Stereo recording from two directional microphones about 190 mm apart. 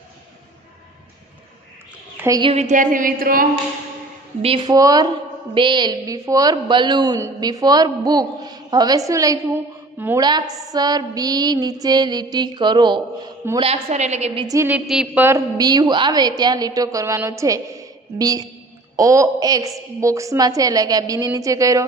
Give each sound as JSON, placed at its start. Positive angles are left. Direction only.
{"t": 2.1, "sound": "a woman's voice", "side_deg": -15}
{"t": 2.5, "sound": "a sound", "side_deg": -40}
{"t": 4.6, "sound": "a woman's voice", "side_deg": -20}
{"t": 14.5, "sound": "a woman's voice", "side_deg": -15}
{"t": 14.9, "sound": "a man's voice", "side_deg": 0}
{"t": 15.2, "sound": "a woman's voice", "side_deg": -15}